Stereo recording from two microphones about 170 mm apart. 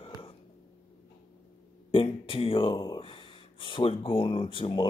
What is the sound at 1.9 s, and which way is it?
Speech, 30° left (ahead or behind).